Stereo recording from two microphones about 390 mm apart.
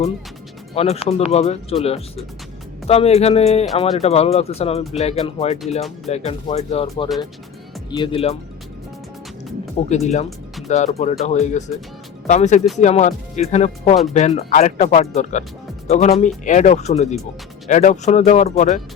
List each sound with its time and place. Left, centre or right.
0.7 s speech: centre
9.9 s speech: centre